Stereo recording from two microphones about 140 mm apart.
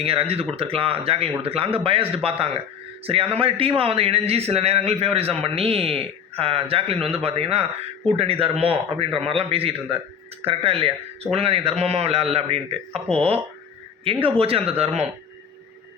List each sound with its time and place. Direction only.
0.0 s a man's voice: 45° right (ahead or behind)